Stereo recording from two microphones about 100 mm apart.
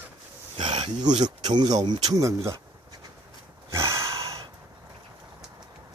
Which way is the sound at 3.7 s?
30° right (ahead or behind).